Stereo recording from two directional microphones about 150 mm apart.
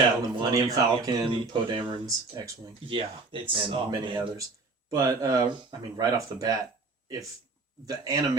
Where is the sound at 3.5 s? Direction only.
35° right (ahead or behind).